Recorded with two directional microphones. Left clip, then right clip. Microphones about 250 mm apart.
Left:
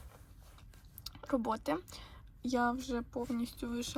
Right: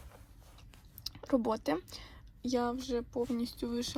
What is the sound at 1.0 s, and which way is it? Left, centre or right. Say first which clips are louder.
Speech: right 4 dB; centre.